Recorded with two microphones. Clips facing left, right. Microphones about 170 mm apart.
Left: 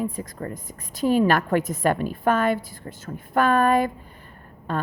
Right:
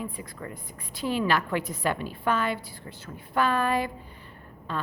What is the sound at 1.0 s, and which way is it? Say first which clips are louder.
A woman's voice: left 7 dB; 45° left (ahead or behind).